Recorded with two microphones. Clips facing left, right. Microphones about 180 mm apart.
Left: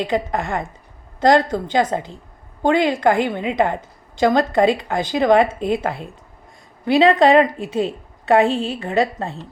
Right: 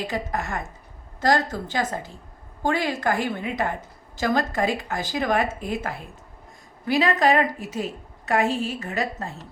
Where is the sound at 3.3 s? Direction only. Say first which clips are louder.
Left 5 dB; 90° left.